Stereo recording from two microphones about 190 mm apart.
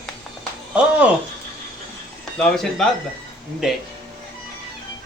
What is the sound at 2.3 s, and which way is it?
Speech, 5° left (ahead or behind).